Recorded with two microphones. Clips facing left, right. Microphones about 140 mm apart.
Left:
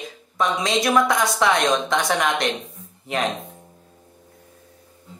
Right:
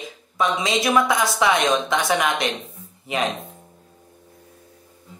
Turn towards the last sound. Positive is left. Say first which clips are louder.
# even
turn(degrees=0)  # may be behind; listen again after turning